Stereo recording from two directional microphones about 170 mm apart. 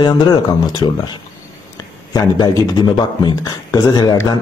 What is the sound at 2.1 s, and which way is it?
A man's voice, 25° left (ahead or behind).